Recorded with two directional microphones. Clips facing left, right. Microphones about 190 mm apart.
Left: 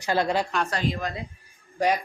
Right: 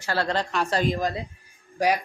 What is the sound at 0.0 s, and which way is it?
Speech, 15° left (ahead or behind).